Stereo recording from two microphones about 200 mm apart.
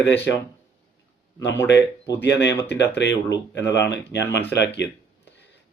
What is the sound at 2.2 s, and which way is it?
Speech, 60° left (ahead or behind).